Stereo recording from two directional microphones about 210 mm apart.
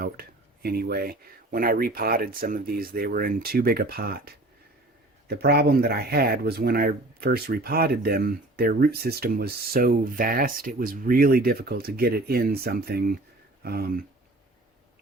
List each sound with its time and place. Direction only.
0.0 s speech: 45° right (ahead or behind)